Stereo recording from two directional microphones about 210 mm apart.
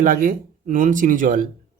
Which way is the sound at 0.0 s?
40° right (ahead or behind).